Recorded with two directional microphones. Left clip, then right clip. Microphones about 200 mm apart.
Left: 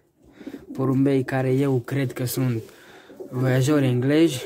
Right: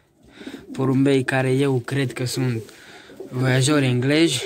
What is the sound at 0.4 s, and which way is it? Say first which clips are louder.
Speech: right 2 dB; 5° left (ahead or behind).